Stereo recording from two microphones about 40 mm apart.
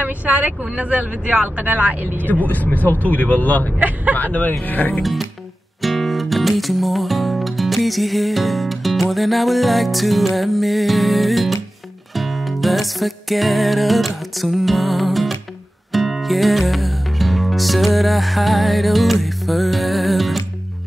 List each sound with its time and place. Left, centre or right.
0.0 s speech: right
1.6 s speech: right
2.2 s speech: left
5.0 s speech: centre
5.8 s music: centre